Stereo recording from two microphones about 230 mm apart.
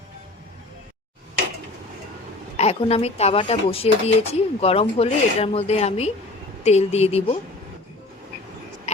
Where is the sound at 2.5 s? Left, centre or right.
Left.